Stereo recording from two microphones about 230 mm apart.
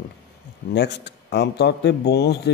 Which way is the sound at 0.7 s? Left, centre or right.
Left.